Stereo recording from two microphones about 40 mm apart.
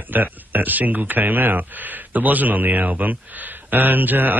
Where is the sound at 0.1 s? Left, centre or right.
Right.